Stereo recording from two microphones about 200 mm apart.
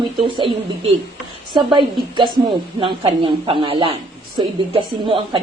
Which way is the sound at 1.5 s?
25° right (ahead or behind).